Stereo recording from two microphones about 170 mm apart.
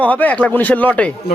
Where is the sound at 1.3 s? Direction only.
70° left (ahead or behind).